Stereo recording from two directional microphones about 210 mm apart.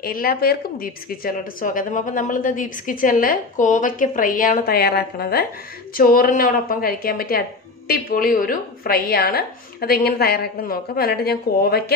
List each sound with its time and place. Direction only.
0.0 s a woman's voice: 45° left (ahead or behind)